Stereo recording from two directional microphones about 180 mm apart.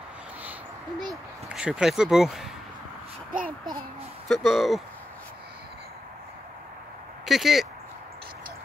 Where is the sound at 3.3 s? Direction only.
50° right (ahead or behind).